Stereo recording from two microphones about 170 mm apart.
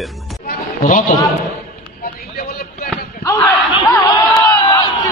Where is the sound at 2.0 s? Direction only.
65° left (ahead or behind).